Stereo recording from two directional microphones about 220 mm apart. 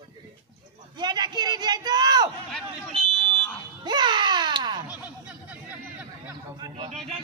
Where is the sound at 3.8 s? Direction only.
20° right (ahead or behind).